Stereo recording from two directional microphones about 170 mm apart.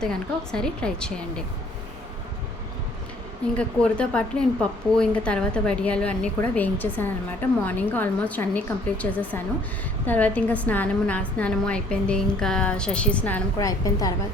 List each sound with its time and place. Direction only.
0.0 s a woman's voice: 5° left (ahead or behind)
3.6 s a woman's voice: 5° left (ahead or behind)
13.7 s a woman's voice: 20° left (ahead or behind)